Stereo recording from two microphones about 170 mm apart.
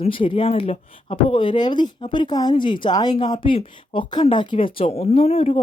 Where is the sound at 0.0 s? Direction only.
30° left (ahead or behind).